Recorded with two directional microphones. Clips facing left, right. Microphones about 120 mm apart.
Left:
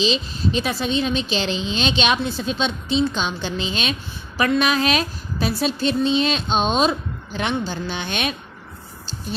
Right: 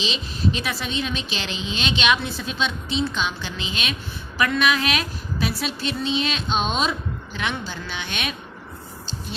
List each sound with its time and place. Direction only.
0.0 s a woman's voice: 30° left (ahead or behind)